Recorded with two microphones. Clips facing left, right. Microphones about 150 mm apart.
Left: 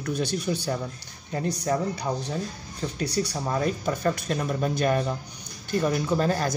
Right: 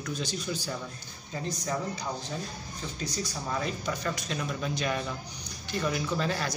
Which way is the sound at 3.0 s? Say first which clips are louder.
Left 8 dB; 65° left (ahead or behind).